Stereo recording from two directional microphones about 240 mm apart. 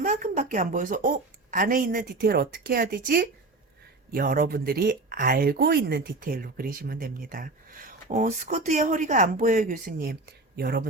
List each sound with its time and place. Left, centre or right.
0.0 s speech: right